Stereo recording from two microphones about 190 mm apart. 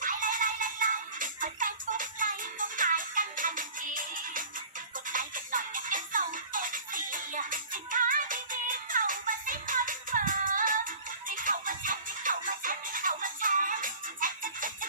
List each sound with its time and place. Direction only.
0.0 s music: 45° right (ahead or behind)